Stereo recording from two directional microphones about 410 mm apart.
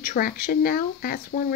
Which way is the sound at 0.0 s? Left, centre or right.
Left.